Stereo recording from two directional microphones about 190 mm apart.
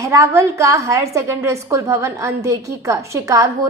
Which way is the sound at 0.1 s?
15° right (ahead or behind).